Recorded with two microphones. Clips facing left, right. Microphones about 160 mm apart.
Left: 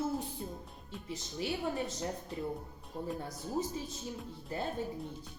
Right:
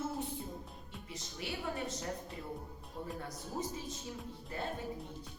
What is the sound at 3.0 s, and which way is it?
Speech, 35° left (ahead or behind).